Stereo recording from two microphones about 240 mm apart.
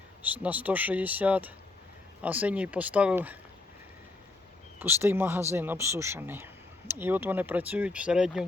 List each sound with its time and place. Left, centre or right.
0.2 s speech: centre
4.8 s speech: centre